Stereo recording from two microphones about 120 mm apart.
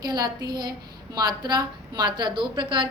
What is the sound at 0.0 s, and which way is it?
A woman's voice, 35° right (ahead or behind).